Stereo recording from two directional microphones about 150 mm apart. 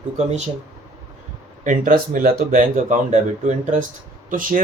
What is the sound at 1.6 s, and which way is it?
Speech, 65° right (ahead or behind).